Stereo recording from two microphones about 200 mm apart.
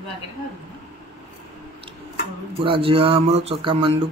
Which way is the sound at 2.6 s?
25° right (ahead or behind).